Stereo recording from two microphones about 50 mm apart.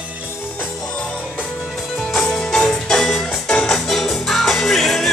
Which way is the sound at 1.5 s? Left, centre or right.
Centre.